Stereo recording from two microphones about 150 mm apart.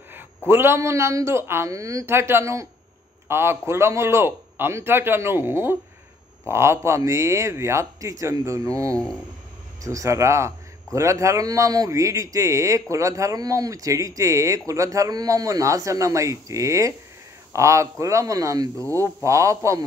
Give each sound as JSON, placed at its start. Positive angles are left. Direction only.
{"t": 0.5, "sound": "a man's voice", "side_deg": -15}